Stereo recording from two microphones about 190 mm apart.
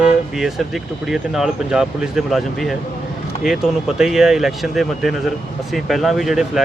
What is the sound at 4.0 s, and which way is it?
Speech, centre (ahead or behind).